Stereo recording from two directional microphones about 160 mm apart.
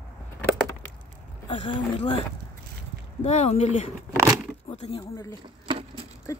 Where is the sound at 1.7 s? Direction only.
25° left (ahead or behind).